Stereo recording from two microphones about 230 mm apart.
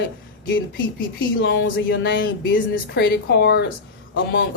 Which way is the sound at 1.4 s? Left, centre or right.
Left.